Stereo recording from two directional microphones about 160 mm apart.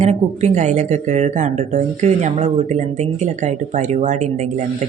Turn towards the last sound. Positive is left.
turn(degrees=-50)  # may be behind; listen again after turning